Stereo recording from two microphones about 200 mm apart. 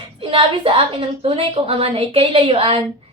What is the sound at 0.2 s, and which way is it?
A woman's voice, 25° right (ahead or behind).